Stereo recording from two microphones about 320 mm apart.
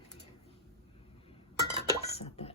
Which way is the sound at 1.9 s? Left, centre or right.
Centre.